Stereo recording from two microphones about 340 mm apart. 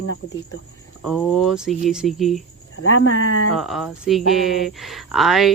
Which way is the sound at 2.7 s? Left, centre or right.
Left.